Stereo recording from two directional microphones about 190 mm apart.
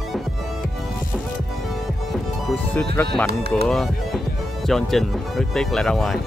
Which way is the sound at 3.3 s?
55° right (ahead or behind).